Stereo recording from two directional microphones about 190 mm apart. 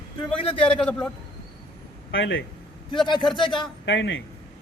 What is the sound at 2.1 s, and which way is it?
Speech, 75° left (ahead or behind).